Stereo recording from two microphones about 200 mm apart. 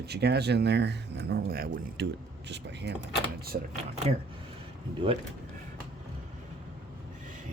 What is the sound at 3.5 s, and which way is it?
Speech, 45° right (ahead or behind).